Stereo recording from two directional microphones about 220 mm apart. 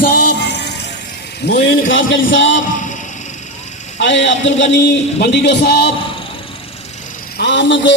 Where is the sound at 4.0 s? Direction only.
55° left (ahead or behind).